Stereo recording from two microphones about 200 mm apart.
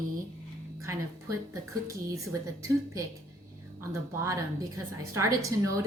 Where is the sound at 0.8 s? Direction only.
15° right (ahead or behind).